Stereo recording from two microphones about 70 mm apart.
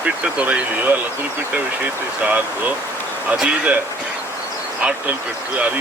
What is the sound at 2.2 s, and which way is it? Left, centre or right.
Speech, right.